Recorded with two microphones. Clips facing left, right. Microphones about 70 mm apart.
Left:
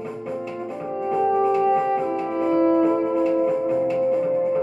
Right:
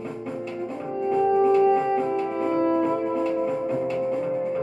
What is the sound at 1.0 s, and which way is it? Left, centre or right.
Music, centre.